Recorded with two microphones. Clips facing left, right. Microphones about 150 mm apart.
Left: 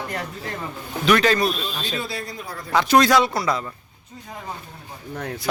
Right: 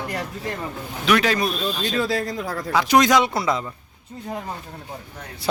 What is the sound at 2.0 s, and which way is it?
Speech, 90° right.